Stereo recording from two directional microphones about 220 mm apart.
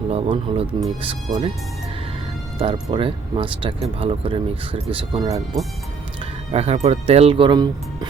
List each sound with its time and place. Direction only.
0.1 s speech: 25° right (ahead or behind)
2.6 s speech: 25° right (ahead or behind)
6.5 s speech: 30° right (ahead or behind)